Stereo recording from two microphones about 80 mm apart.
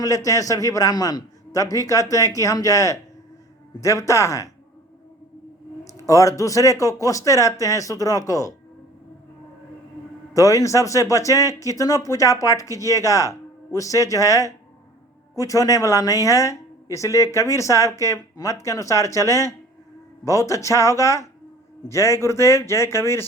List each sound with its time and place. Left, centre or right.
0.0 s a man's voice: left
5.8 s a man's voice: left
10.3 s a man's voice: left